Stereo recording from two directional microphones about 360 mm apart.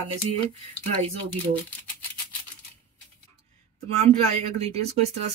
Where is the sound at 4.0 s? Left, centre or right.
Centre.